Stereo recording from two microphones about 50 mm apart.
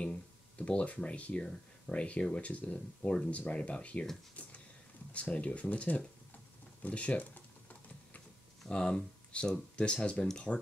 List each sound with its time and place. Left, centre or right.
0.0 s speech: left
1.4 s speech: centre
3.3 s speech: left
4.4 s a sound: left
5.1 s speech: left
8.6 s speech: centre